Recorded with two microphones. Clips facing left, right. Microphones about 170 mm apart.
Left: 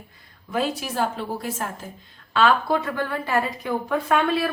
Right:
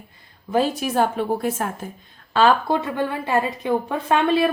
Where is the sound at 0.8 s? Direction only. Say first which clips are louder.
Right 5 dB; 55° right (ahead or behind).